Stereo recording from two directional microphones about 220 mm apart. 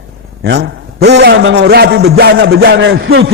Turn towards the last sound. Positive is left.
turn(degrees=-60)  # may be behind; listen again after turning